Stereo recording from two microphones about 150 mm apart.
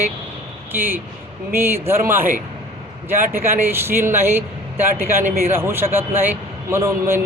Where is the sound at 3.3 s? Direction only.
15° right (ahead or behind).